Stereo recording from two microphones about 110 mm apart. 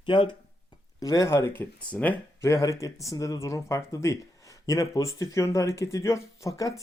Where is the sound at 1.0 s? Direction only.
30° left (ahead or behind); by 2.5 s 15° left (ahead or behind).